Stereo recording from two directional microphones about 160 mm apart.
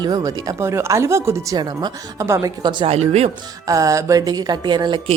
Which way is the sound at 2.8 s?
40° right (ahead or behind).